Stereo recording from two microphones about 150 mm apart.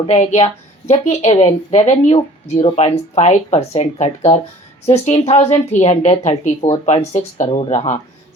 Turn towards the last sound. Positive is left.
turn(degrees=50)  # may be behind; listen again after turning